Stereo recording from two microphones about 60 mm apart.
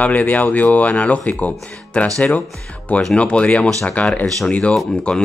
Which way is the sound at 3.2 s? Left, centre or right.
Centre.